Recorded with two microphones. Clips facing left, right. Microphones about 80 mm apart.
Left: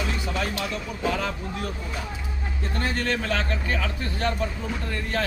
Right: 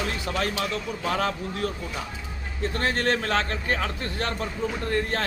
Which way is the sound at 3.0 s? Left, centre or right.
Right.